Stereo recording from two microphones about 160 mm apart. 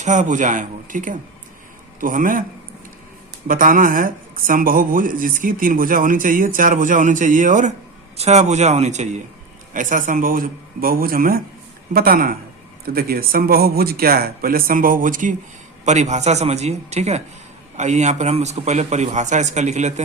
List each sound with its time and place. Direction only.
0.0 s a man's voice: 50° right (ahead or behind)
3.4 s a man's voice: 60° right (ahead or behind)